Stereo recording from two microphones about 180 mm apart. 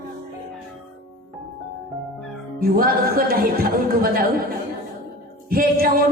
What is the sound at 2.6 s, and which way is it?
A man's voice, 55° right (ahead or behind).